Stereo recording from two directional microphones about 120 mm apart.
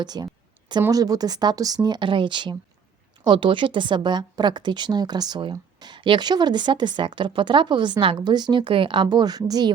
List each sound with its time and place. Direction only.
0.0 s a woman's voice: 35° right (ahead or behind)